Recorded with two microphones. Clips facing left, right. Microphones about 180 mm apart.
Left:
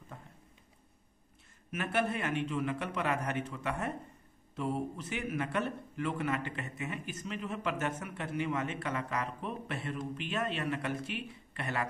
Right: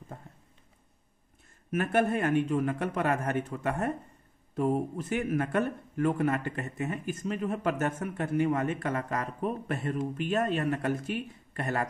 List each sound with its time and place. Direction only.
1.7 s a man's voice: 50° right (ahead or behind)